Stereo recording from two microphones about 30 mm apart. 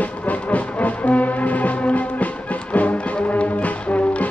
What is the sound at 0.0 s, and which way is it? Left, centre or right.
Music, left.